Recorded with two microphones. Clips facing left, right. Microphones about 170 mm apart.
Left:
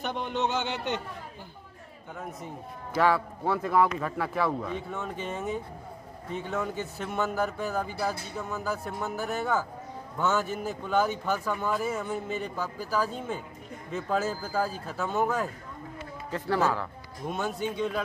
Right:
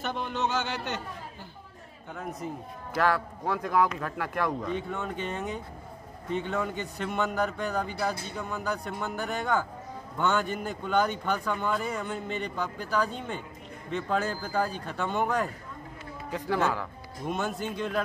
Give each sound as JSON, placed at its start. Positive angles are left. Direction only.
{"t": 0.0, "sound": "speech", "side_deg": 20}
{"t": 2.1, "sound": "speech", "side_deg": 0}
{"t": 16.3, "sound": "a man's voice", "side_deg": -10}
{"t": 16.8, "sound": "speech", "side_deg": 0}